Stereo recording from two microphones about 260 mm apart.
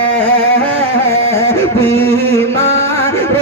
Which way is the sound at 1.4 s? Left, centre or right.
Centre.